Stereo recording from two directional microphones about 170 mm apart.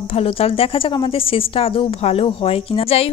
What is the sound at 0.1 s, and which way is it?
A woman's voice, 35° left (ahead or behind).